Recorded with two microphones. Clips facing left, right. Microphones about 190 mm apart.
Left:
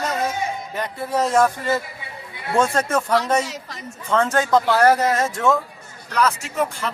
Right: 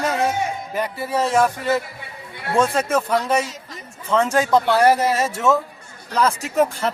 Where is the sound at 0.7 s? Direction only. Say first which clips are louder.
Right 1 dB; 10° right (ahead or behind).